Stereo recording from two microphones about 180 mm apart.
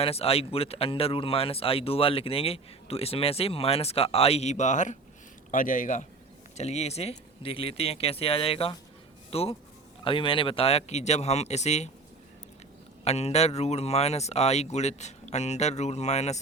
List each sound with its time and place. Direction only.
0.0 s speech: 35° left (ahead or behind)
13.1 s speech: 35° left (ahead or behind)